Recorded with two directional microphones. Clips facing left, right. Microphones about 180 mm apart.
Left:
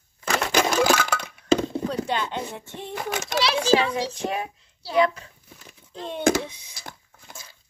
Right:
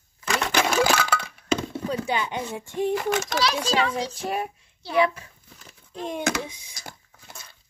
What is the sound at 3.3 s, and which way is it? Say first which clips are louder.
Speech: left 4 dB; 10° left (ahead or behind).